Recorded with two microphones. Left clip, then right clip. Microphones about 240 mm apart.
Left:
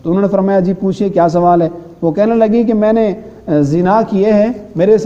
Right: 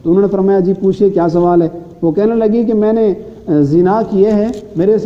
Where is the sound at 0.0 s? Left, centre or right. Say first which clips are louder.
Right 2 dB; left.